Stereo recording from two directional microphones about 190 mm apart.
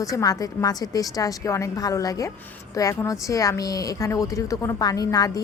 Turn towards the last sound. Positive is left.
turn(degrees=20)  # may be behind; listen again after turning